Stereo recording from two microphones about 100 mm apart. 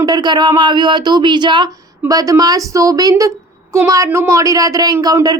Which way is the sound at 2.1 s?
40° right (ahead or behind).